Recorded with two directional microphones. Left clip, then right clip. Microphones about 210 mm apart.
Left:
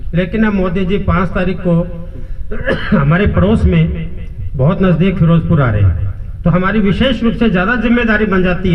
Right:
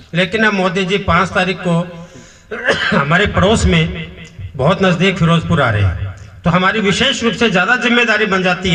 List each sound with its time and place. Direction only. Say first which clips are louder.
0.1 s a man's voice: right 3 dB; 30° left (ahead or behind)